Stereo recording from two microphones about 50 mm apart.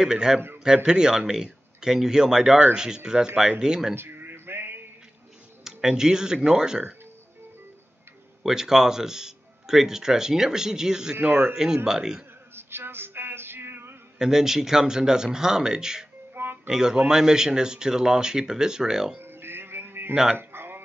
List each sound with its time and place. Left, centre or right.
0.0 s speech: centre
3.9 s a sound: right
5.6 s speech: centre
8.4 s speech: centre
12.5 s music: right
14.1 s speech: centre
19.1 s sheep: right
20.3 s a sound: right